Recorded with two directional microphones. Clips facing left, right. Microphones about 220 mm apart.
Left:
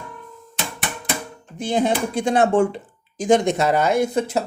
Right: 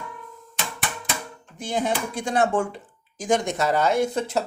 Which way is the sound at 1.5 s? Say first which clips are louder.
Left 5 dB; 30° left (ahead or behind).